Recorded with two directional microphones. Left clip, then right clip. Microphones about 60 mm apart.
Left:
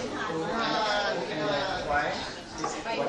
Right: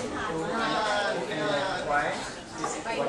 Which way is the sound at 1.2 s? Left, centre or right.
Centre.